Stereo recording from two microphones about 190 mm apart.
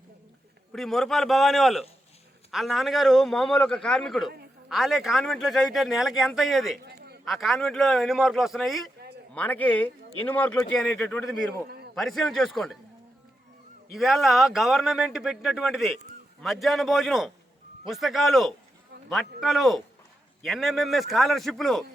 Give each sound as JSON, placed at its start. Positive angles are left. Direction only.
{"t": 0.7, "sound": "speech", "side_deg": 0}
{"t": 13.9, "sound": "a man's voice", "side_deg": 0}